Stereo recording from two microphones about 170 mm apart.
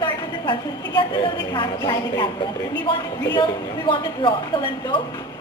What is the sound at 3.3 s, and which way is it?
A woman's voice, 30° left (ahead or behind).